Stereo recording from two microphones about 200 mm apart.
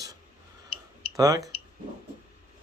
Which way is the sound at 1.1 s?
15° right (ahead or behind).